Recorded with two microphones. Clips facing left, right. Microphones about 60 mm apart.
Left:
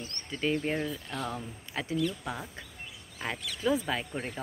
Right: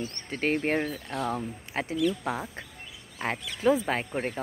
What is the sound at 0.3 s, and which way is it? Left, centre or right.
Speech, right.